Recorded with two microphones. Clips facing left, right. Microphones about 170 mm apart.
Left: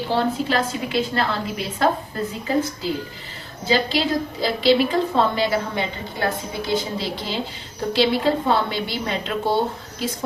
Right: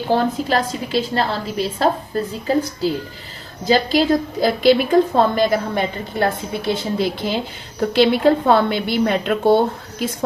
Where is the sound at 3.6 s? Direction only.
40° right (ahead or behind).